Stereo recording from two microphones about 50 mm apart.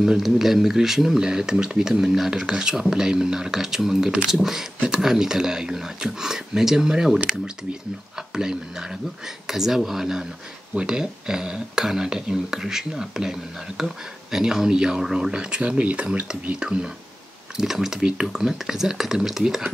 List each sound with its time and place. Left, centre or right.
0.2 s speech: centre
8.3 s speech: centre
15.3 s speech: centre